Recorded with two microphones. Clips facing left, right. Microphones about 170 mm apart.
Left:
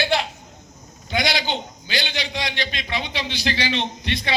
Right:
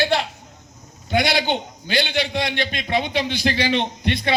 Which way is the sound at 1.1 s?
55° right (ahead or behind).